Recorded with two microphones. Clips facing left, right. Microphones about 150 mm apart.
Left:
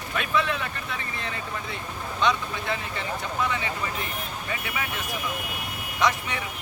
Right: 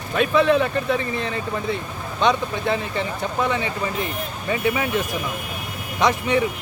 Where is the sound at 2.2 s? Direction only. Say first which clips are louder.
Right 6 dB; 25° right (ahead or behind).